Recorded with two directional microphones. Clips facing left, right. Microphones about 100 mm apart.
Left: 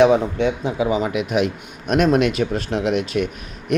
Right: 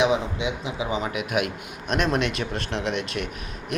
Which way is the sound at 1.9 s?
45° left (ahead or behind).